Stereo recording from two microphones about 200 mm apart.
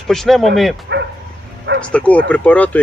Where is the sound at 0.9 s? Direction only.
60° right (ahead or behind).